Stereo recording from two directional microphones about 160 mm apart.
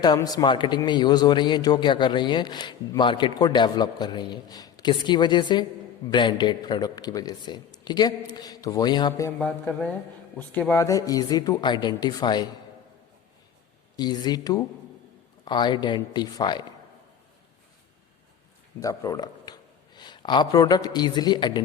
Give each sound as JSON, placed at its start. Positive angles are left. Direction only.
{"t": 0.0, "sound": "a man's voice", "side_deg": 25}
{"t": 9.4, "sound": "a man's voice", "side_deg": 5}
{"t": 13.9, "sound": "a man's voice", "side_deg": 25}
{"t": 18.8, "sound": "speech", "side_deg": 20}